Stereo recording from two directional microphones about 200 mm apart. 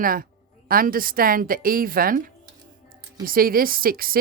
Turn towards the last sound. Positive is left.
turn(degrees=-45)  # may be behind; listen again after turning